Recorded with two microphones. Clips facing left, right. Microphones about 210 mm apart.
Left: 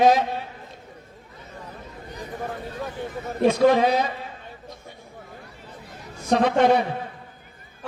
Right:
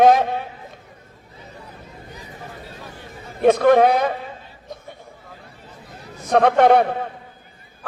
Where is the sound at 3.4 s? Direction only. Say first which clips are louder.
Right 4 dB; 55° right (ahead or behind).